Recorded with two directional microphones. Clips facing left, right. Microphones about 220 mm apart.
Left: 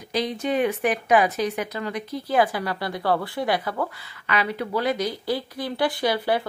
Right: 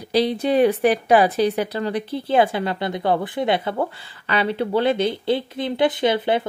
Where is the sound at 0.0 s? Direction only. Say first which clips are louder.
Right 6 dB; 35° right (ahead or behind).